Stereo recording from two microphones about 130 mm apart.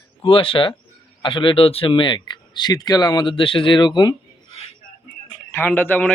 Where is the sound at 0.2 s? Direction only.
45° left (ahead or behind).